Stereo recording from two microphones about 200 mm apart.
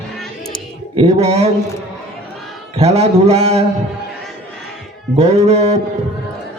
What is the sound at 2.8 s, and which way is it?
Speech, 35° right (ahead or behind).